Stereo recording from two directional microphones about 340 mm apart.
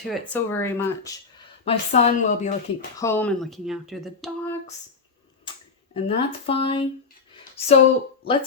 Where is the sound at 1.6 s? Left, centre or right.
Centre.